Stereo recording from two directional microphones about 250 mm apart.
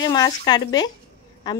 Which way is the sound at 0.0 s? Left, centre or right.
Centre.